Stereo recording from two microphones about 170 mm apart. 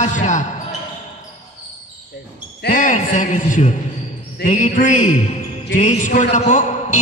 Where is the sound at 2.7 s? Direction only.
45° left (ahead or behind).